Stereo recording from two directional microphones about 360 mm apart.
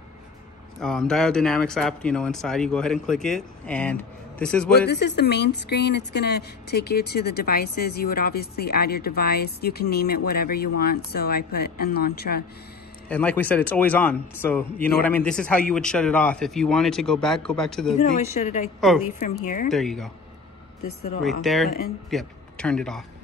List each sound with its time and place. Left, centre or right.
0.7 s speech: centre
4.7 s speech: left
13.1 s speech: centre
18.4 s speech: centre
18.8 s speech: centre
19.1 s speech: centre
19.7 s speech: centre
21.2 s speech: centre
21.6 s speech: left
22.1 s a man's voice: centre